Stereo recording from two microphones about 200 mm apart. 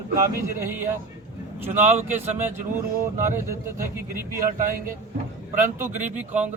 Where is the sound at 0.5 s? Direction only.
10° right (ahead or behind).